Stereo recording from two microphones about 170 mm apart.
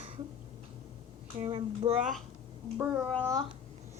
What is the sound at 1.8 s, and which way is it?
Speech, 30° right (ahead or behind).